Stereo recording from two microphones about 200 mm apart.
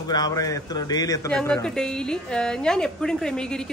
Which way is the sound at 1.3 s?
5° left (ahead or behind).